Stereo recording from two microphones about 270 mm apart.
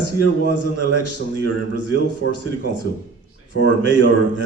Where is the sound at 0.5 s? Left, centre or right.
Left.